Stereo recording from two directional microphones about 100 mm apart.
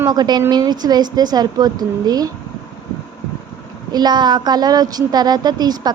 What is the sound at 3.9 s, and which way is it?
A woman's voice, 45° right (ahead or behind).